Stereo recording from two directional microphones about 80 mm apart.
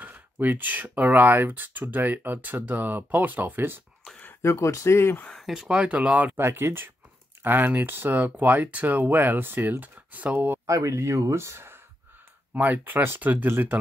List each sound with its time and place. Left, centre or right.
0.0 s speech: right
4.4 s speech: left
5.4 s speech: centre
6.3 s speech: right
10.7 s speech: right